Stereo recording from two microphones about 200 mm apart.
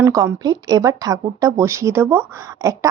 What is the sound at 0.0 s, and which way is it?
Speech, 15° right (ahead or behind).